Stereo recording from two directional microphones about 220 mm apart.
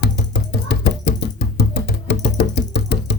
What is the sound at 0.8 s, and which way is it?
Music, 50° left (ahead or behind).